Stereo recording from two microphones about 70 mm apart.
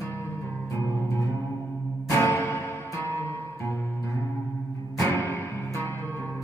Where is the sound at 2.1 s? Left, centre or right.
Left.